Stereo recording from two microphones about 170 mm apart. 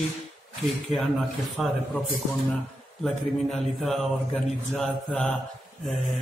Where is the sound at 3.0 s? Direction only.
Centre (ahead or behind).